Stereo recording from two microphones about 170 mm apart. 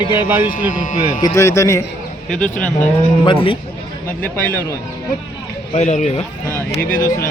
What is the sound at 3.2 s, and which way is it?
Speech, 30° left (ahead or behind).